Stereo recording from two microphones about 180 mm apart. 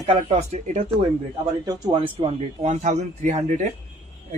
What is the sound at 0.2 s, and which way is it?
Speech, 35° right (ahead or behind).